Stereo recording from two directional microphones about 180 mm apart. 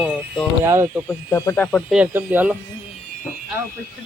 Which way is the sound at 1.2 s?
15° left (ahead or behind).